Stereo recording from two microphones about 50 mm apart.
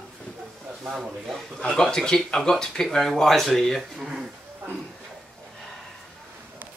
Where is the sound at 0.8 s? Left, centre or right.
Centre.